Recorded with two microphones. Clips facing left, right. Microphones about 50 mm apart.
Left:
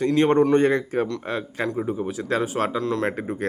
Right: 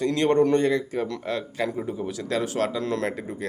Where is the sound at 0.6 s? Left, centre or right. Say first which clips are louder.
Left 3 dB; left.